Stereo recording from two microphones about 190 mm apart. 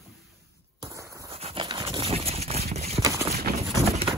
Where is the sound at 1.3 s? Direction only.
30° right (ahead or behind).